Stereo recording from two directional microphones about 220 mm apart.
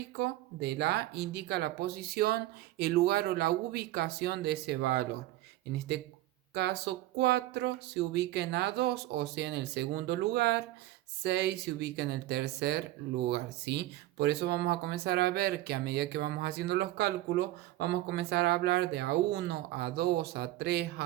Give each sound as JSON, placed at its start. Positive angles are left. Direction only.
{"t": 0.2, "sound": "speech", "side_deg": -50}
{"t": 6.5, "sound": "speech", "side_deg": -50}